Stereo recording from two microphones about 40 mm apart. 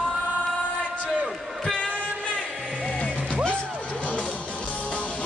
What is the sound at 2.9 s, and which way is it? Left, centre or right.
Music, left.